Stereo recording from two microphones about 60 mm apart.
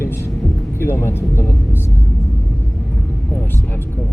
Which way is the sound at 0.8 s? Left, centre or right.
Left.